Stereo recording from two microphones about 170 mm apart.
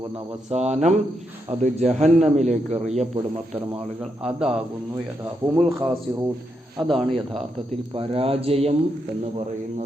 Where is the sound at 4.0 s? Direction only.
5° right (ahead or behind).